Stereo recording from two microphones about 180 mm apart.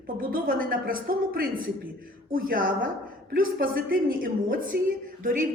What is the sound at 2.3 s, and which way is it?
A woman's voice, 50° right (ahead or behind).